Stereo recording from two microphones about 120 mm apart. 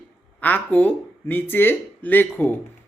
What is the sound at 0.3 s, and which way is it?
A man's voice, 15° left (ahead or behind).